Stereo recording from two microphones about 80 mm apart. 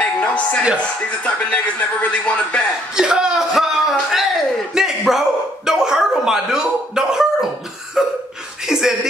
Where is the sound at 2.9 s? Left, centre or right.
Centre.